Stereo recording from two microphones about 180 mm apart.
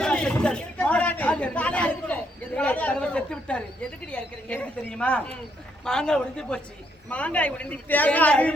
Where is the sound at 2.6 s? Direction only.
10° left (ahead or behind).